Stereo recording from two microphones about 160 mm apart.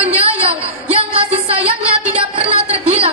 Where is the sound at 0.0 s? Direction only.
35° right (ahead or behind).